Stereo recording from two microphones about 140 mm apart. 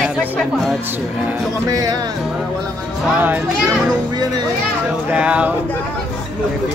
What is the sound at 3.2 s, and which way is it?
Speech, 15° right (ahead or behind).